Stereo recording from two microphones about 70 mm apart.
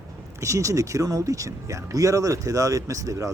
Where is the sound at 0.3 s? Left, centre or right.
Right.